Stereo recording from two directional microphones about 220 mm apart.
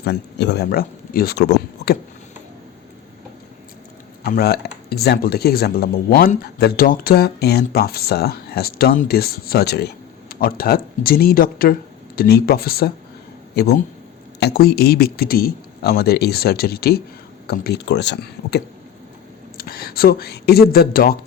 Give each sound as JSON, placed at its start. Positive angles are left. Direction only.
{"t": 0.0, "sound": "speech", "side_deg": 50}
{"t": 4.2, "sound": "speech", "side_deg": 45}